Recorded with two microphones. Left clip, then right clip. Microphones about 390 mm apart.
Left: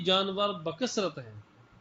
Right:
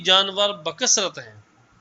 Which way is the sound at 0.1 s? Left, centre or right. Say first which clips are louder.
Right 10 dB; right.